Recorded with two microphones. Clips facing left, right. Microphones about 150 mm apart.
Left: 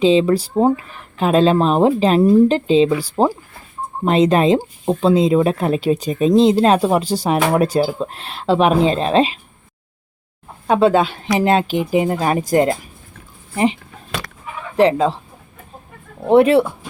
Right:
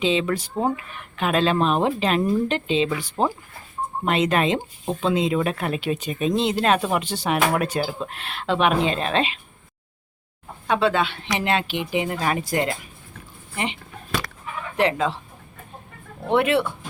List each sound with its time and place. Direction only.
0.0 s speech: 35° left (ahead or behind)
10.7 s speech: 40° left (ahead or behind)
14.8 s speech: 35° left (ahead or behind)
16.3 s speech: 35° left (ahead or behind)